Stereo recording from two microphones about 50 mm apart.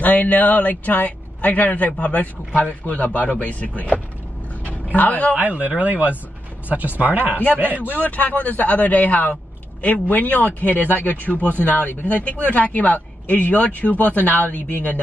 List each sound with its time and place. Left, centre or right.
0.0 s a man's voice: left
5.3 s speech: right
7.9 s a man's voice: left